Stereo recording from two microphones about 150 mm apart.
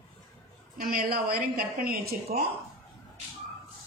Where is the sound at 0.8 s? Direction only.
80° right.